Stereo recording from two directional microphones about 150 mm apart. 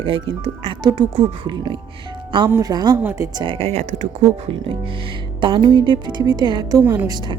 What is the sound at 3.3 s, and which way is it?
Speech, 35° right (ahead or behind).